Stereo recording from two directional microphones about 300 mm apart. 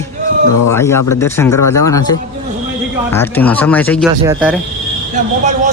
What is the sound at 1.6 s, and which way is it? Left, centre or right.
Speech, left.